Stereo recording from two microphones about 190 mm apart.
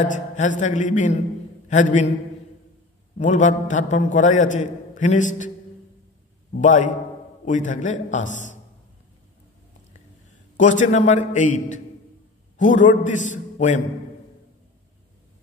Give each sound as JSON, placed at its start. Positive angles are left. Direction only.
{"t": 0.0, "sound": "a man's voice", "side_deg": 40}
{"t": 3.2, "sound": "a man's voice", "side_deg": 40}
{"t": 6.6, "sound": "a man's voice", "side_deg": 40}
{"t": 10.8, "sound": "a man's voice", "side_deg": 40}